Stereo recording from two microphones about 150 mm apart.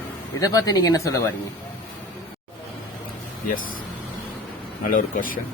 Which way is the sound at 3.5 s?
65° left (ahead or behind).